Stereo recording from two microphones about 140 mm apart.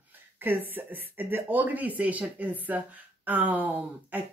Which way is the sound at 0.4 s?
15° right (ahead or behind).